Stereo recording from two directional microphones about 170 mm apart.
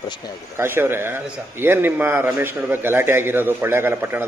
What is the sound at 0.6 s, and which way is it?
A man's voice, 15° right (ahead or behind).